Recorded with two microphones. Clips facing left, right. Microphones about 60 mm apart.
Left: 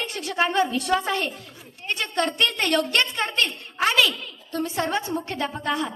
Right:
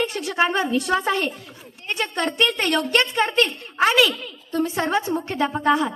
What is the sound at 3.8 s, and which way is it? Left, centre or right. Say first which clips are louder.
A woman's voice: right 2 dB; centre.